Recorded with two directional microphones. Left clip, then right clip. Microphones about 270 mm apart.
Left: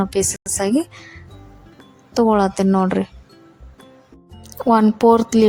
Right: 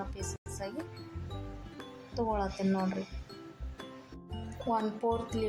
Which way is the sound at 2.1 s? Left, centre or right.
Left.